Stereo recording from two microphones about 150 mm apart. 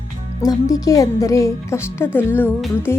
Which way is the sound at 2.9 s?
15° left (ahead or behind).